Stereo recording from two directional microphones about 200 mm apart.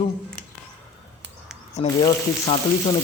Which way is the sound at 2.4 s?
30° left (ahead or behind).